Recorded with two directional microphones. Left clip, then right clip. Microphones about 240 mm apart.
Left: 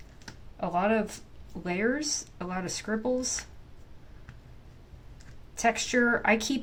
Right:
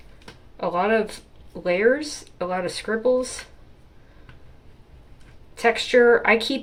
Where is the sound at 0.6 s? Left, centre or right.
Left.